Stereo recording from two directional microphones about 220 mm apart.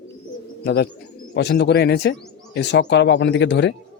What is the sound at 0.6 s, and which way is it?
Speech, 45° left (ahead or behind).